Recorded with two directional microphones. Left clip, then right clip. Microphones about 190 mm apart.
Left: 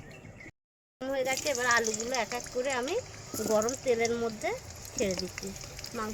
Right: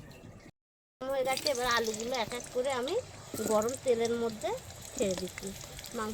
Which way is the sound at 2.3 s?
Centre (ahead or behind).